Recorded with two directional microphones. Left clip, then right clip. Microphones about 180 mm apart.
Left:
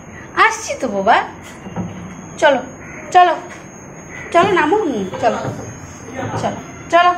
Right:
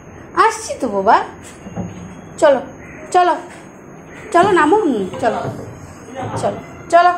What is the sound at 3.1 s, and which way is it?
A woman's voice, 20° right (ahead or behind).